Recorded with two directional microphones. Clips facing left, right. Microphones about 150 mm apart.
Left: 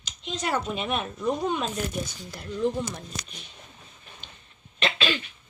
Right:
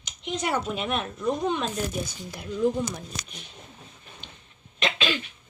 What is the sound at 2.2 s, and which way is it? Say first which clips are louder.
Speech: right 3 dB; 5° right (ahead or behind).